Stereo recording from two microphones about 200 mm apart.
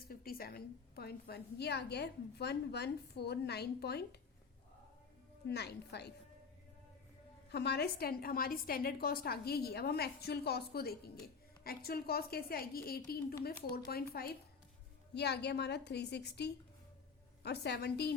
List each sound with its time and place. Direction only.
0.1 s a woman's voice: 50° left (ahead or behind)
5.5 s a woman's voice: 55° left (ahead or behind)
7.5 s a woman's voice: 55° left (ahead or behind)